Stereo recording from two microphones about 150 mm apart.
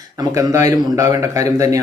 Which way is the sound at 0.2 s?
20° right (ahead or behind).